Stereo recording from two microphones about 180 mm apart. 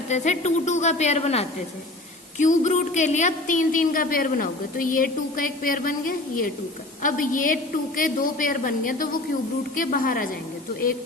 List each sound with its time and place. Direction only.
0.1 s a woman's voice: 40° left (ahead or behind)